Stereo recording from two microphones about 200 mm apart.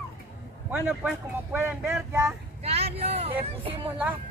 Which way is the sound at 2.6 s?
30° right (ahead or behind).